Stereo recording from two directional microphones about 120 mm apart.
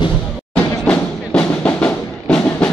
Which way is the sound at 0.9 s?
10° left (ahead or behind).